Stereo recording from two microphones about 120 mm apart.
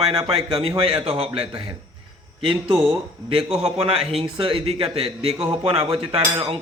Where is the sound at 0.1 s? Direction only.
50° right (ahead or behind).